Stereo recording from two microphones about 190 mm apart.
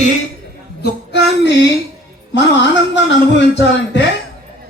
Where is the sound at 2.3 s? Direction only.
70° left (ahead or behind).